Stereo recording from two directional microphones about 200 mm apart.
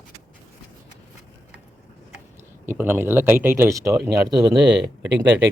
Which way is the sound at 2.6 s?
10° right (ahead or behind).